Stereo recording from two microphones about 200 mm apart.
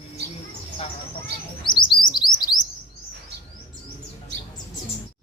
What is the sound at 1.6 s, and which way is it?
Bird, 25° left (ahead or behind).